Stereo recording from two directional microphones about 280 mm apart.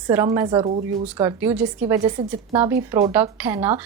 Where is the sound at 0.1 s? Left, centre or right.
Centre.